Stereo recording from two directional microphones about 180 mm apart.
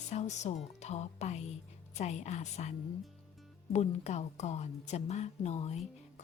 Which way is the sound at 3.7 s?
40° left (ahead or behind).